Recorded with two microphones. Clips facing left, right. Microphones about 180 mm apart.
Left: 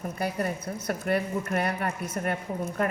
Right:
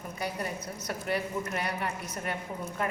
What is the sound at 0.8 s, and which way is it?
A woman's voice, 55° left (ahead or behind).